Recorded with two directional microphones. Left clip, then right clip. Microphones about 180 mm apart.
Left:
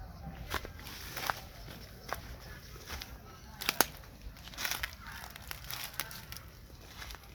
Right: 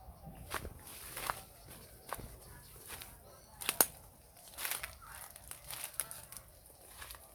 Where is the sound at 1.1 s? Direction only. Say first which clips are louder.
Left 4 dB; 50° left (ahead or behind).